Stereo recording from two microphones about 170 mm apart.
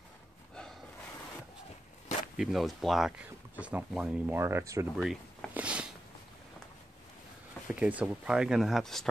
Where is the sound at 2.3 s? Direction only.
Centre (ahead or behind).